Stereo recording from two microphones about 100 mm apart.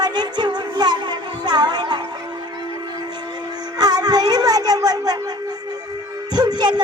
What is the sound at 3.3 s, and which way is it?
Music, 45° right (ahead or behind).